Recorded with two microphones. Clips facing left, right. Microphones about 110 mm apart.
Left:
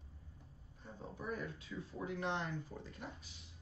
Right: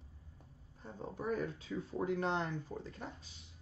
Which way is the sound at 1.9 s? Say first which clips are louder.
Right 5 dB; 40° right (ahead or behind).